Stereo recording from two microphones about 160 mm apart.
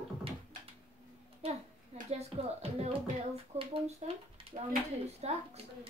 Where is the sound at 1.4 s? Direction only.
35° right (ahead or behind).